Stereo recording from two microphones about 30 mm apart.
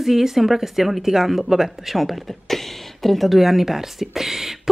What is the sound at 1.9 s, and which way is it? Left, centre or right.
A woman's voice, centre.